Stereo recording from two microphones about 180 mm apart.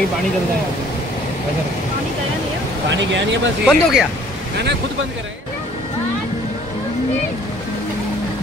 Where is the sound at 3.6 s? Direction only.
Centre (ahead or behind).